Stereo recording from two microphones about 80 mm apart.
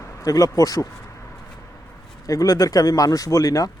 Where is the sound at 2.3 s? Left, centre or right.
Left.